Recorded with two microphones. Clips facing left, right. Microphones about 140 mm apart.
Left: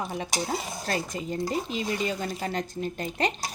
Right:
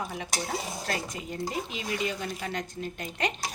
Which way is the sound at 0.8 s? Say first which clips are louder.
Left 3 dB; 35° left (ahead or behind).